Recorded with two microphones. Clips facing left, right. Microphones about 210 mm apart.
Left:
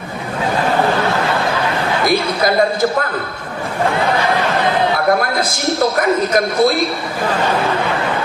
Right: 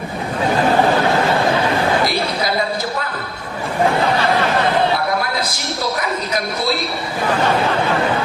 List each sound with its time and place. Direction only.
2.0 s basketball bounce: 50° left (ahead or behind)
5.4 s a man's voice: 50° left (ahead or behind)